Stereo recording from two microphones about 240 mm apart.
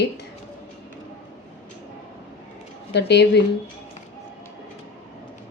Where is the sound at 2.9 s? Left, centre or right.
Left.